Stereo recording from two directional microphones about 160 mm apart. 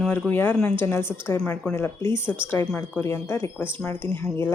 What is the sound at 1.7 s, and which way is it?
Speech, 15° left (ahead or behind).